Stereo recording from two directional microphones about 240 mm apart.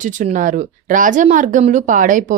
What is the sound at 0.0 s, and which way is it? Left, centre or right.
Speech, right.